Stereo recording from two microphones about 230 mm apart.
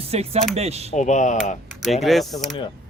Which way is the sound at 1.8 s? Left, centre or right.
Centre.